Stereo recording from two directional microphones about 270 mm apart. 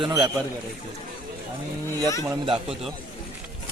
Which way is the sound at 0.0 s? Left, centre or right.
Centre.